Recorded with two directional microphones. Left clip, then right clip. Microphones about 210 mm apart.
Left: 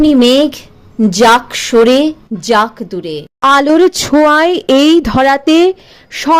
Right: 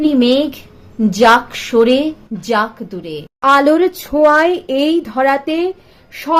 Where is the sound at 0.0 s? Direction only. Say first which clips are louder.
Left 5 dB; 35° left (ahead or behind).